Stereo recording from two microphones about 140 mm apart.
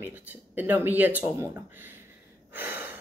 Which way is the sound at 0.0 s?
15° right (ahead or behind).